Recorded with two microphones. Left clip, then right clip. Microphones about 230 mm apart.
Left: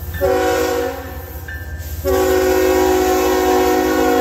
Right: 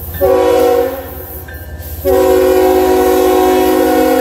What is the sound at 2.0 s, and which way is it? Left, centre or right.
Train, centre.